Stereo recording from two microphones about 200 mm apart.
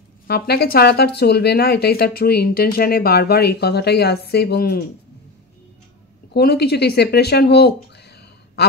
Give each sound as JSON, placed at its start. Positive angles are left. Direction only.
{"t": 0.3, "sound": "speech", "side_deg": 55}
{"t": 6.3, "sound": "speech", "side_deg": 55}